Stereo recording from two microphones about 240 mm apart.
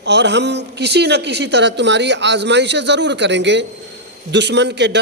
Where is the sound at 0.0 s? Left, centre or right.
Right.